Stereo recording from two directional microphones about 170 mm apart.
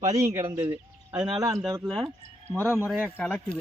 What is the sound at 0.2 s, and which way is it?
Speech, 15° right (ahead or behind).